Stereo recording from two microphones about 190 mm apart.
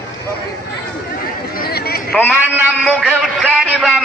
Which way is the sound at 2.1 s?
10° left (ahead or behind).